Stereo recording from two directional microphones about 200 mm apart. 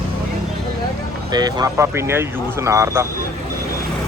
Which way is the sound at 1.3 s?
20° right (ahead or behind).